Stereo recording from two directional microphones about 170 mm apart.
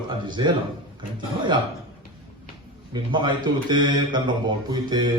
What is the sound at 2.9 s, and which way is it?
A man's voice, 25° right (ahead or behind).